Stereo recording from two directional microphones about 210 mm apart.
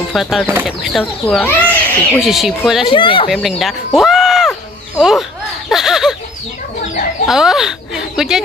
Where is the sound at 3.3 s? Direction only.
Centre (ahead or behind).